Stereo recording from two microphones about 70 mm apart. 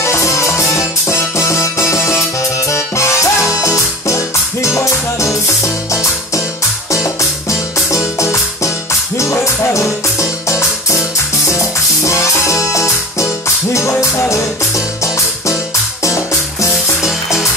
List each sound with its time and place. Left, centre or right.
0.0 s music: left
6.9 s music: left